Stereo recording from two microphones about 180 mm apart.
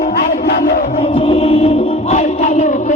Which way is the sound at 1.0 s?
30° left (ahead or behind).